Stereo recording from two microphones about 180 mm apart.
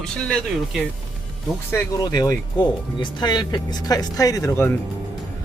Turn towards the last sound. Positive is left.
turn(degrees=15)  # may be behind; listen again after turning